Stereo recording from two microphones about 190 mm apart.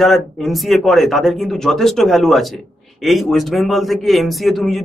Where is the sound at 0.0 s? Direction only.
Centre (ahead or behind).